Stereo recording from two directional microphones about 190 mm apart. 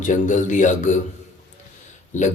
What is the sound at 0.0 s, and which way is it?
Speech, 40° left (ahead or behind).